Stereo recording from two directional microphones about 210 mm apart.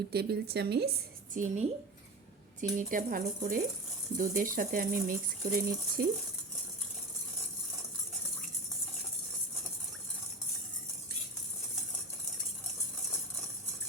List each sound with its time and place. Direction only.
0.1 s a woman's voice: 50° right (ahead or behind)